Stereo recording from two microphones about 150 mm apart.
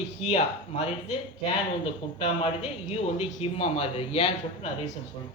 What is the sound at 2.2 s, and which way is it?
Speech, 40° left (ahead or behind).